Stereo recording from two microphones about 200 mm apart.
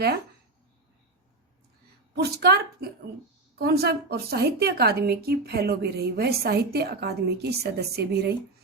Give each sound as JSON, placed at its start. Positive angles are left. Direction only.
{"t": 2.1, "sound": "a woman's voice", "side_deg": -55}